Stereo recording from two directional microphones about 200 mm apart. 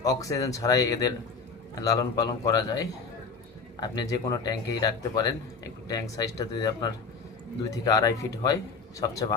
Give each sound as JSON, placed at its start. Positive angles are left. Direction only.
{"t": 0.0, "sound": "speech", "side_deg": 15}